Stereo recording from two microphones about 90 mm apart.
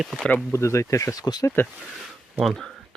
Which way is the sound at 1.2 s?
45° left (ahead or behind).